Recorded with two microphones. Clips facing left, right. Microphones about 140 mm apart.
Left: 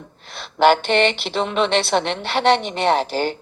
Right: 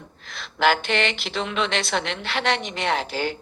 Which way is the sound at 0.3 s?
30° left (ahead or behind).